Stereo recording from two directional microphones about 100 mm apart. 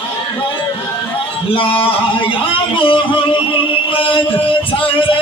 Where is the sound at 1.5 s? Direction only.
60° left (ahead or behind).